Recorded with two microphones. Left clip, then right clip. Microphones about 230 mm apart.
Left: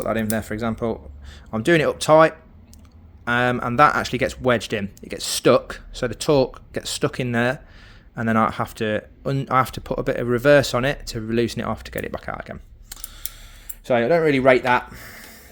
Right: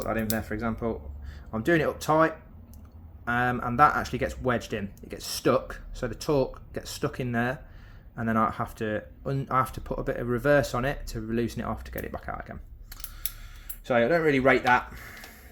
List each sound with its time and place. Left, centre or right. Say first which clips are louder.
0.0 s speech: left 6 dB; left